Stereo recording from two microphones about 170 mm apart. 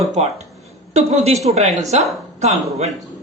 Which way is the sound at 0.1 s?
40° right (ahead or behind).